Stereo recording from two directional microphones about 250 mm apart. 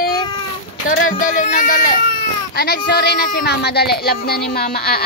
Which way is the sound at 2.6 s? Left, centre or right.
Left.